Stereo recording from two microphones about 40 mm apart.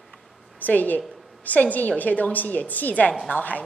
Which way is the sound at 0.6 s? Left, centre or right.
Left.